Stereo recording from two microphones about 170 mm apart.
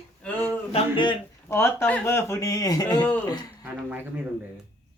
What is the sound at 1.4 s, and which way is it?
Speech, 15° left (ahead or behind).